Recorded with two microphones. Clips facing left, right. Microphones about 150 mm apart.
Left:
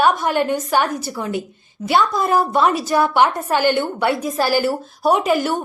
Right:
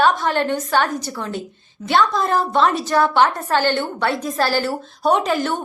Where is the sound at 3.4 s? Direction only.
15° left (ahead or behind).